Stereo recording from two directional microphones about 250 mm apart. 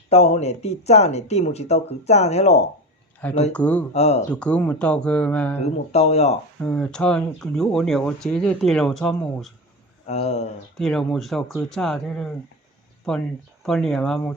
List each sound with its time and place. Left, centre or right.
0.1 s speech: left
3.5 s speech: centre
3.9 s speech: left
4.3 s speech: centre
5.6 s speech: left
6.6 s speech: centre
10.1 s speech: left
10.8 s speech: centre